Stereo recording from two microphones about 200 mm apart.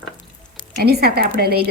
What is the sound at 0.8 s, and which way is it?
Speech, 50° right (ahead or behind).